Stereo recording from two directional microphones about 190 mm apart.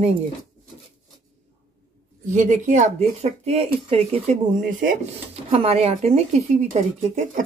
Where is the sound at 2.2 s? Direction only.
40° right (ahead or behind).